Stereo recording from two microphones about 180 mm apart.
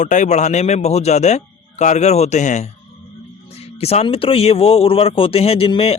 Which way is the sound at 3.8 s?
35° left (ahead or behind).